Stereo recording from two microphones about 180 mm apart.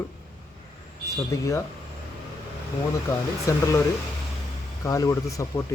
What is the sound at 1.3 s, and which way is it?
Speech, 15° left (ahead or behind).